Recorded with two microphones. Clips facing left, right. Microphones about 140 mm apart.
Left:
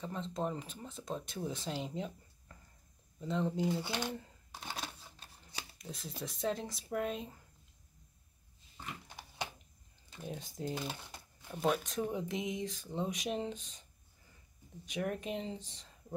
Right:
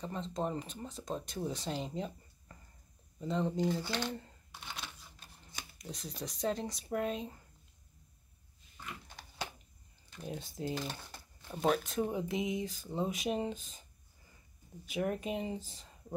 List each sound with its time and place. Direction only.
0.0 s speech: centre (ahead or behind)
3.7 s speech: 20° left (ahead or behind)
4.6 s typewriter: 35° left (ahead or behind)
5.8 s speech: centre (ahead or behind)
10.2 s speech: centre (ahead or behind)
14.9 s speech: 5° right (ahead or behind)